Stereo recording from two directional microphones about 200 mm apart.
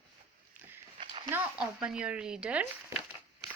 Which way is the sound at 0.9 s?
25° right (ahead or behind).